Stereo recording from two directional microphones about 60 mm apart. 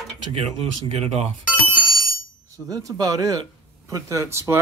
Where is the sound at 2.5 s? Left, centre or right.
Right.